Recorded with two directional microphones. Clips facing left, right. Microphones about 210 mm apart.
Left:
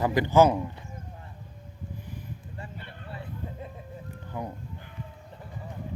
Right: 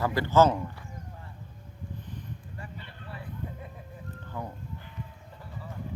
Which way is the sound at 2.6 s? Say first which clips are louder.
Left 3 dB; 25° left (ahead or behind).